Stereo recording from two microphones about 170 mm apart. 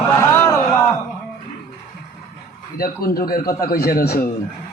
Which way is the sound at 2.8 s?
60° left (ahead or behind).